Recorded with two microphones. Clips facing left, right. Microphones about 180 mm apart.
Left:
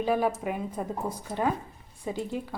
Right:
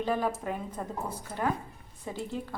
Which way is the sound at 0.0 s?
10° left (ahead or behind).